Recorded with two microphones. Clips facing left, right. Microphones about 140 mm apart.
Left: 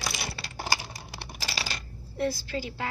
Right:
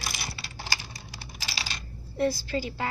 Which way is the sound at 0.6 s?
50° left (ahead or behind).